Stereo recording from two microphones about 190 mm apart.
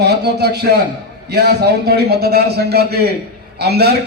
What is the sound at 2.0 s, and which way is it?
A man's voice, 55° right (ahead or behind).